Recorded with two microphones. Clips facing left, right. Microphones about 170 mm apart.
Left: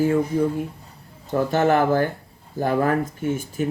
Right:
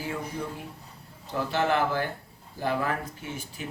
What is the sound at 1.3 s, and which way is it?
Speech, 45° left (ahead or behind).